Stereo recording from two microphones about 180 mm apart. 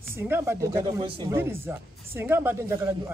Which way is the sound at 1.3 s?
15° right (ahead or behind).